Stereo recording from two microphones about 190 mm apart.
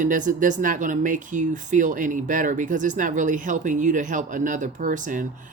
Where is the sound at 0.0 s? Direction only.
45° right (ahead or behind).